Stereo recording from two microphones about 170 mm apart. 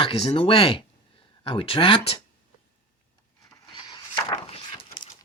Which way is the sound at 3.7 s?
30° left (ahead or behind).